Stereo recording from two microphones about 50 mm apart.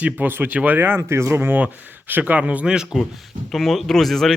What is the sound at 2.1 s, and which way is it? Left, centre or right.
Speech, right.